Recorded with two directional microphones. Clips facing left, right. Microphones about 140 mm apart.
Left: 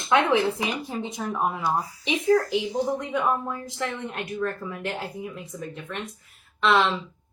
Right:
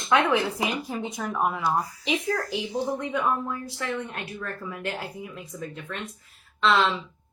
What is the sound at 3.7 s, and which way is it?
Speech, 20° left (ahead or behind).